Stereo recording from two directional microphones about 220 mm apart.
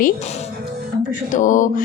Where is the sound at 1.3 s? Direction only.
35° left (ahead or behind).